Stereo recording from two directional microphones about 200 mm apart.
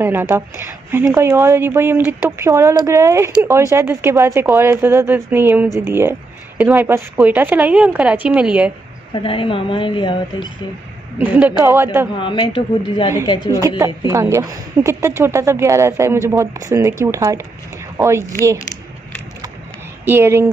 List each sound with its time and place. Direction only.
0.0 s speech: 10° right (ahead or behind)
9.1 s a woman's voice: 25° left (ahead or behind)
11.1 s speech: 10° right (ahead or behind)
12.2 s a woman's voice: 25° left (ahead or behind)
13.6 s speech: 15° right (ahead or behind)
20.1 s speech: 10° right (ahead or behind)